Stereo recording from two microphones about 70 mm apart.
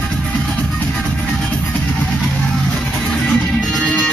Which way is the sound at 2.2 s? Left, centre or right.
Centre.